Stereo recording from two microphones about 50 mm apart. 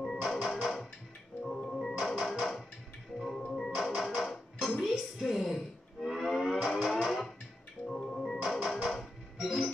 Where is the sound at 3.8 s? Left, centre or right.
Centre.